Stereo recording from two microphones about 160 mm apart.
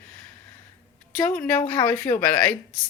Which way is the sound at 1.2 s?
10° left (ahead or behind).